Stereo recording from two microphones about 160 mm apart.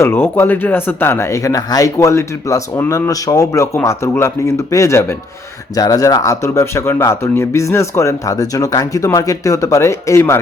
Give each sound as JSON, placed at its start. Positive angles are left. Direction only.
{"t": 0.0, "sound": "speech", "side_deg": 15}